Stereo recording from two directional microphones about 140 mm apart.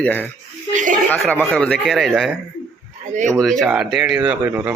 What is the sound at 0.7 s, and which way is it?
Speech, 65° right (ahead or behind).